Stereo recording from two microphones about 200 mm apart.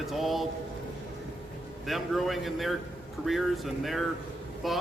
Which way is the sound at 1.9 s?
Centre (ahead or behind).